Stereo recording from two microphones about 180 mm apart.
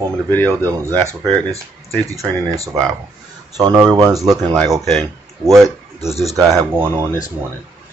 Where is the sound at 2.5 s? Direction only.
20° right (ahead or behind).